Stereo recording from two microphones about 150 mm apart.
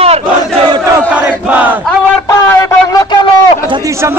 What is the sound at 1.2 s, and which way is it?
Crowd, 10° right (ahead or behind).